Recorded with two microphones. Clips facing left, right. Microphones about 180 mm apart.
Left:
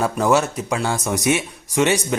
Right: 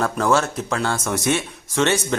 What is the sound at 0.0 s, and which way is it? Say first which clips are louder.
A man's voice: left 2 dB; 15° left (ahead or behind).